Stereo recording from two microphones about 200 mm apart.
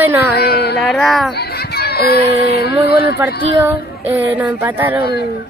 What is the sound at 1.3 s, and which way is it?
A child's voice, 50° left (ahead or behind).